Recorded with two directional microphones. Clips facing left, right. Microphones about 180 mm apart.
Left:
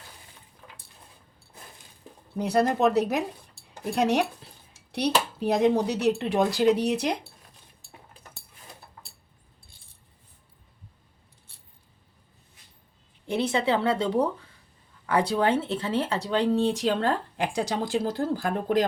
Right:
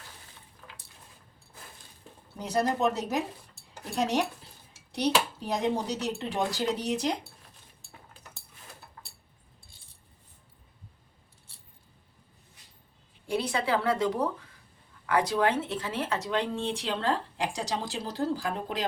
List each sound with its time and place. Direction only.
2.4 s speech: 65° left (ahead or behind)
13.2 s a woman's voice: 25° left (ahead or behind); by 18.9 s 50° left (ahead or behind)